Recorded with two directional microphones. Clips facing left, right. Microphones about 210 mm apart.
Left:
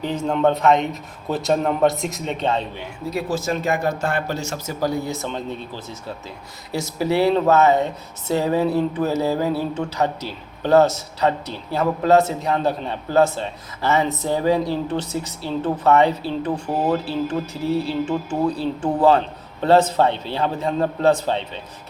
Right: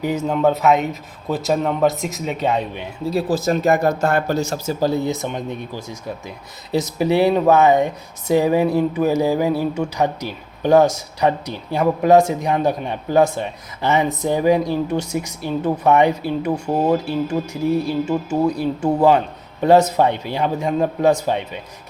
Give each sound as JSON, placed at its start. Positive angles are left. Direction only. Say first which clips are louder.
{"t": 0.0, "sound": "a man's voice", "louder": "right 2 dB", "side_deg": -10}
{"t": 3.1, "sound": "speech", "louder": "right 5 dB", "side_deg": -35}